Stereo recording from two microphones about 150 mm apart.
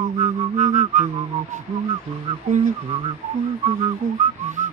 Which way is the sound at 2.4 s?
55° right (ahead or behind).